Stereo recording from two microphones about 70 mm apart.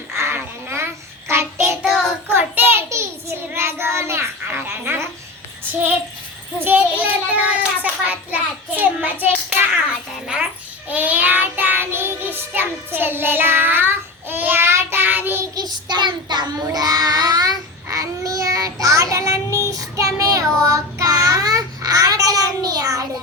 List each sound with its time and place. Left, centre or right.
0.3 s a sound: right
1.3 s child singing: right
2.9 s child singing: right
6.6 s child singing: right
10.8 s child singing: right
15.5 s child singing: right
16.7 s child singing: right
17.9 s child singing: right